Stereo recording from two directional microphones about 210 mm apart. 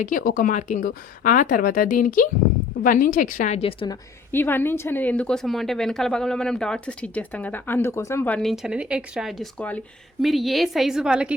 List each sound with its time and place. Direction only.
0.0 s speech: 40° left (ahead or behind)
4.3 s a woman's voice: 10° left (ahead or behind)